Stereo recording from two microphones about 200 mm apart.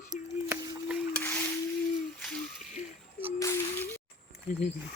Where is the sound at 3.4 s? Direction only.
15° left (ahead or behind).